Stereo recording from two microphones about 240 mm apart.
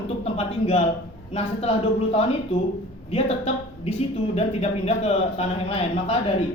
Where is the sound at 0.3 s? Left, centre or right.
Left.